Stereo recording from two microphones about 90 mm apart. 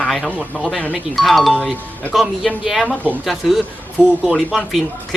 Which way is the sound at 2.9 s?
20° left (ahead or behind).